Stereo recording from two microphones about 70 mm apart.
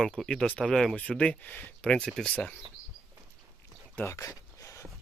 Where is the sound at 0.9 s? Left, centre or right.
Centre.